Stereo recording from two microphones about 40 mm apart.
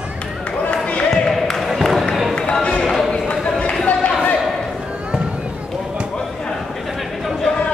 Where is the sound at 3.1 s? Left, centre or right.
Left.